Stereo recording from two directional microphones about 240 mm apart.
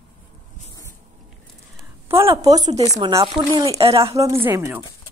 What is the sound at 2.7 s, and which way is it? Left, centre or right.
A woman's voice, right.